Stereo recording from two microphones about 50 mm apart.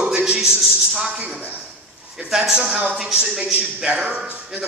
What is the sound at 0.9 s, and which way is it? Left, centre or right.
A woman's voice, centre.